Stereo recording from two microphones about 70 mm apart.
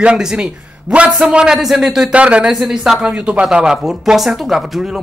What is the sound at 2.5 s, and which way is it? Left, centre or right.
Speech, centre.